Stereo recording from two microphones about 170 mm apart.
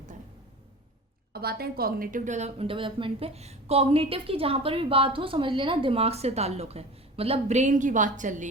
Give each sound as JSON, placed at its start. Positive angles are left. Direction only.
{"t": 1.3, "sound": "a woman's voice", "side_deg": -65}